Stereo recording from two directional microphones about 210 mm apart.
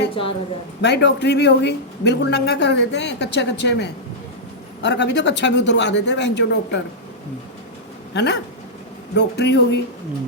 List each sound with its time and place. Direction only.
0.1 s a woman's voice: 25° left (ahead or behind)
0.8 s a man's voice: 55° left (ahead or behind)
8.1 s a man's voice: 55° left (ahead or behind)